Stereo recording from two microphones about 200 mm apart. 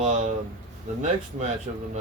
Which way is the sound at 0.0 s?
35° right (ahead or behind).